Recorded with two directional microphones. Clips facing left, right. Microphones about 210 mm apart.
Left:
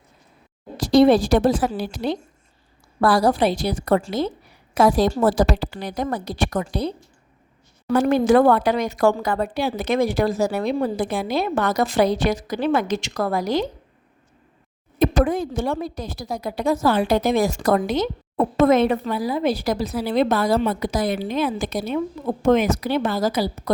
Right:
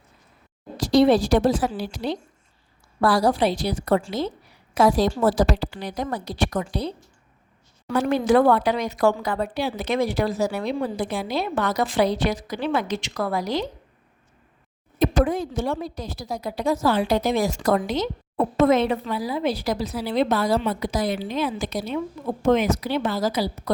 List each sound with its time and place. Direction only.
0.8 s speech: 50° left (ahead or behind)
14.9 s speech: 55° left (ahead or behind)